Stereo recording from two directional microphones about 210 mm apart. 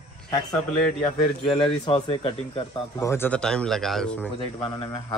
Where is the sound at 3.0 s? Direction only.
10° left (ahead or behind).